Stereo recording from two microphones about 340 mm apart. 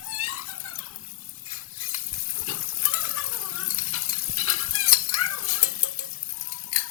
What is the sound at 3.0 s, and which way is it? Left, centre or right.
Stir, left.